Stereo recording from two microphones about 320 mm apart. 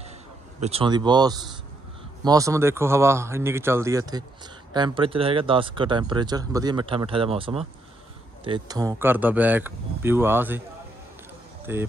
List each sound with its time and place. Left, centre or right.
0.6 s speech: centre
11.7 s speech: centre